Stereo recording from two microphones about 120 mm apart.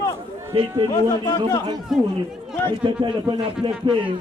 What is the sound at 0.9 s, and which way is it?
Speech, 35° left (ahead or behind).